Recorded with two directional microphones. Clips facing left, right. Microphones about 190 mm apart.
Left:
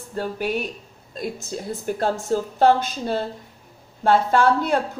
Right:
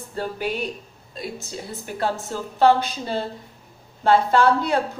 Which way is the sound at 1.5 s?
45° left (ahead or behind).